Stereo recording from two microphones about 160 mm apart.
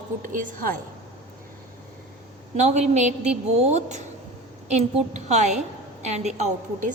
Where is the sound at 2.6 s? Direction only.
45° right (ahead or behind).